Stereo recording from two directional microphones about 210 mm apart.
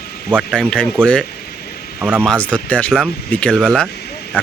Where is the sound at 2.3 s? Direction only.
5° left (ahead or behind).